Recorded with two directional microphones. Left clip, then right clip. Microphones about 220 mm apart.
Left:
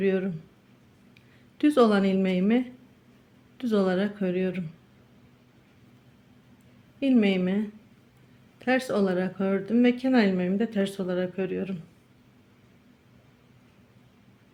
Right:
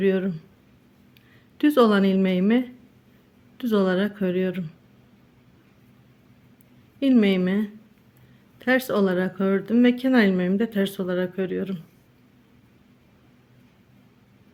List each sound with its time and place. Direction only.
0.0 s speech: 20° right (ahead or behind)
1.5 s speech: 20° right (ahead or behind)
7.0 s speech: 20° right (ahead or behind)